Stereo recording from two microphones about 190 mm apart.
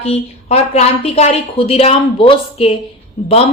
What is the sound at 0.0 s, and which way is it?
A woman's voice, 35° left (ahead or behind).